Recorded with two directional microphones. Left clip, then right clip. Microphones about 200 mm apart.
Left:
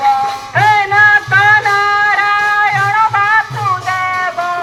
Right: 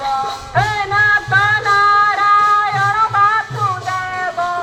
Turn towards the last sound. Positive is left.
turn(degrees=20)  # may be behind; listen again after turning